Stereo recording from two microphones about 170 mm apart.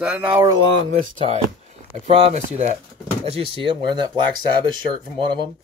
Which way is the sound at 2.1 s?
40° right (ahead or behind).